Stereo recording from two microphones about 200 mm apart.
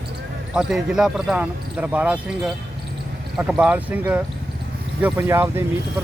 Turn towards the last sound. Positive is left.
turn(degrees=-10)  # may be behind; listen again after turning